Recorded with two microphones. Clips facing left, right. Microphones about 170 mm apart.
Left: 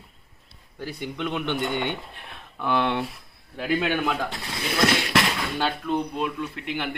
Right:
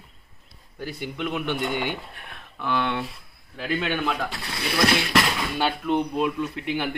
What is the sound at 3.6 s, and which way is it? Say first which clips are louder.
Speech: left 2 dB; 5° left (ahead or behind).